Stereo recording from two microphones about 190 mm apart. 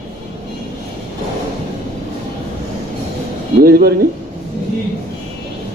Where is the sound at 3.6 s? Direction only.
50° right (ahead or behind).